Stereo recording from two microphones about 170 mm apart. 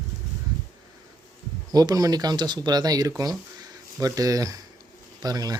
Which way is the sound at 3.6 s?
20° right (ahead or behind).